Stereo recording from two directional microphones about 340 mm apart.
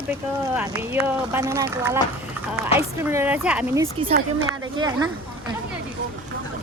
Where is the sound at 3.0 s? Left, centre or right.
Centre.